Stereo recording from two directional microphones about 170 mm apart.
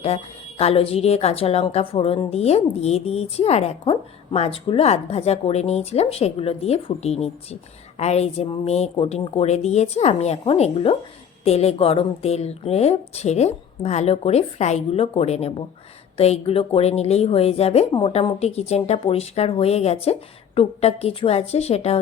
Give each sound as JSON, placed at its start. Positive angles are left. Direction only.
{"t": 0.0, "sound": "speech", "side_deg": 35}